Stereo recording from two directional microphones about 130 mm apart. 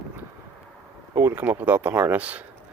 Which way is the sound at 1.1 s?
20° right (ahead or behind).